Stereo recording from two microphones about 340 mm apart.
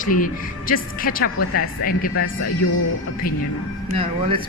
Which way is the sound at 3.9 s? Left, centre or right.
Centre.